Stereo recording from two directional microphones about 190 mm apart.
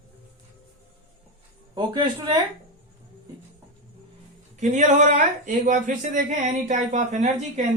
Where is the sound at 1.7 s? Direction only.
25° right (ahead or behind).